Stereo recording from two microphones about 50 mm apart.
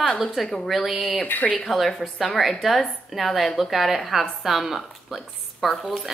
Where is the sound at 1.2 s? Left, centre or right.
Left.